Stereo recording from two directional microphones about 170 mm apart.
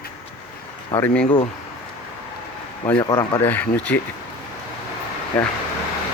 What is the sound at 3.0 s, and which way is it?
Speech, 25° left (ahead or behind).